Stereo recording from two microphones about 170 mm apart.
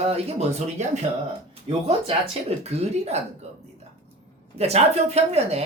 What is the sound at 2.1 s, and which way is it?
Speech, 35° right (ahead or behind).